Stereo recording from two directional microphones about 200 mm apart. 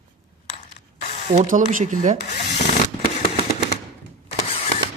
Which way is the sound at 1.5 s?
40° right (ahead or behind).